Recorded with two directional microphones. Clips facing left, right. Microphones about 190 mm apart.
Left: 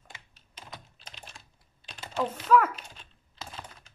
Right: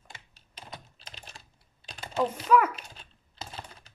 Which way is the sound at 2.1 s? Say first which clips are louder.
Even; 10° right (ahead or behind).